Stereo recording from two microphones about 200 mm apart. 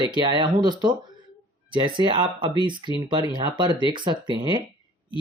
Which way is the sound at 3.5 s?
25° right (ahead or behind).